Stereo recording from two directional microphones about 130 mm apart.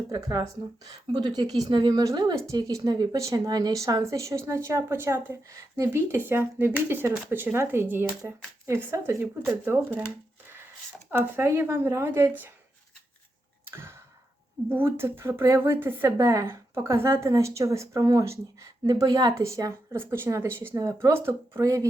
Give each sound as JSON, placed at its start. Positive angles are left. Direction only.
{"t": 0.1, "sound": "speech", "side_deg": -30}
{"t": 11.1, "sound": "speech", "side_deg": -20}
{"t": 13.7, "sound": "tick-tock", "side_deg": -20}
{"t": 14.7, "sound": "speech", "side_deg": -15}